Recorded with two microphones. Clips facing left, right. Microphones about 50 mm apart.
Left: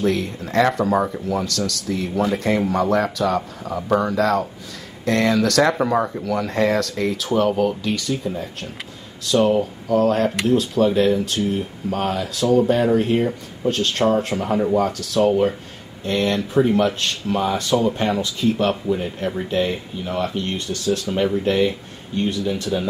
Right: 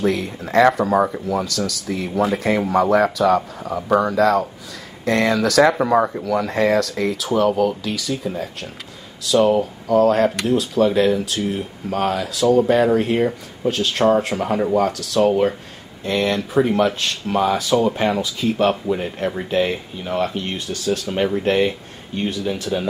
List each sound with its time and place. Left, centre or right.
0.0 s speech: centre
21.1 s speech: centre